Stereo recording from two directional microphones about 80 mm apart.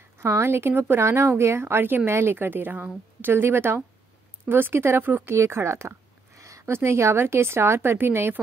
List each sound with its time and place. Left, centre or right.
0.2 s a woman's voice: right